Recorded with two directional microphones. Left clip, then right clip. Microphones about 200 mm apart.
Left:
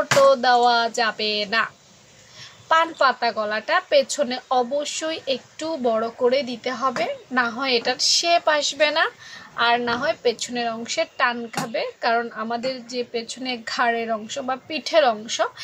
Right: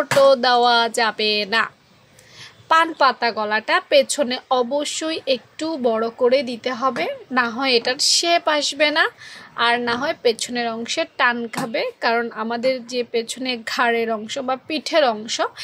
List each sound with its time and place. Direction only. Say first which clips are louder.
0.2 s a woman's voice: right 2 dB; 40° right (ahead or behind)
2.7 s a woman's voice: right 2 dB; 40° right (ahead or behind)